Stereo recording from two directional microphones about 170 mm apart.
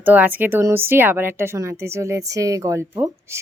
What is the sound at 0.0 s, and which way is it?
Speech, 10° right (ahead or behind).